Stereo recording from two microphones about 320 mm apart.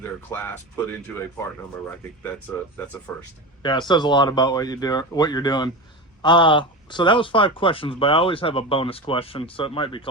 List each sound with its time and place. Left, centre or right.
0.0 s speech: centre
2.7 s speech: centre